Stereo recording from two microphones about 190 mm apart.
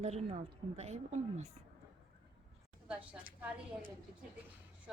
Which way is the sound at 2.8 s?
10° right (ahead or behind).